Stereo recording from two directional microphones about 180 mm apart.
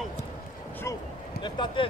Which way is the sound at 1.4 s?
25° left (ahead or behind).